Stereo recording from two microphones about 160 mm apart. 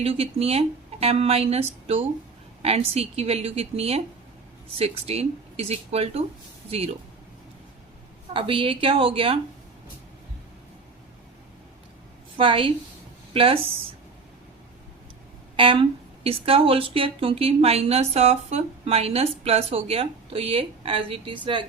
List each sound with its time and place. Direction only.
0.0 s speech: 40° right (ahead or behind)
8.3 s speech: 35° right (ahead or behind)
12.4 s speech: 35° right (ahead or behind)
15.5 s speech: 35° right (ahead or behind)